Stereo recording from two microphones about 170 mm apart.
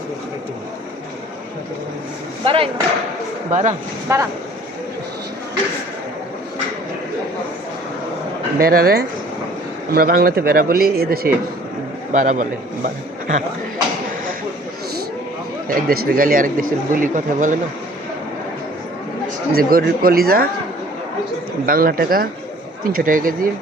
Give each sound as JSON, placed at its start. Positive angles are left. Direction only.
{"t": 2.4, "sound": "speech", "side_deg": -30}
{"t": 3.5, "sound": "a man's voice", "side_deg": -45}
{"t": 4.1, "sound": "speech", "side_deg": -15}
{"t": 8.5, "sound": "speech", "side_deg": -60}
{"t": 12.1, "sound": "a man's voice", "side_deg": -50}
{"t": 15.7, "sound": "speech", "side_deg": -55}
{"t": 19.5, "sound": "speech", "side_deg": -60}
{"t": 21.7, "sound": "speech", "side_deg": -60}